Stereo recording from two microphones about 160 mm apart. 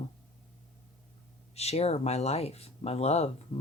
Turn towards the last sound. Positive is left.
turn(degrees=40)  # may be behind; listen again after turning